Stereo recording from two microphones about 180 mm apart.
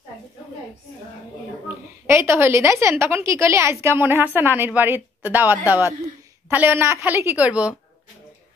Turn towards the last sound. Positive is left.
turn(degrees=-5)  # may be behind; listen again after turning